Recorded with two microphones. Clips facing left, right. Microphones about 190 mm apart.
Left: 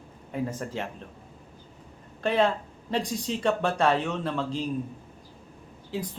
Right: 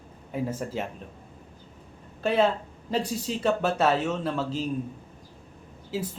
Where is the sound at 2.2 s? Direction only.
5° right (ahead or behind).